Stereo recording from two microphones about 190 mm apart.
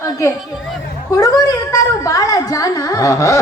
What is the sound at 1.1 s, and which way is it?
A woman's voice, 20° left (ahead or behind).